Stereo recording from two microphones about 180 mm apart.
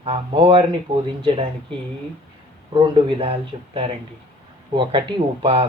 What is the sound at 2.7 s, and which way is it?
A man's voice, 25° right (ahead or behind).